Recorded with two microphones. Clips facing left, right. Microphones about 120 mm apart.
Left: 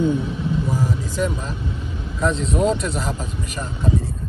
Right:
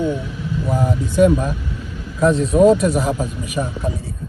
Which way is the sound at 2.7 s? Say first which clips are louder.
Right 8 dB; 45° right (ahead or behind).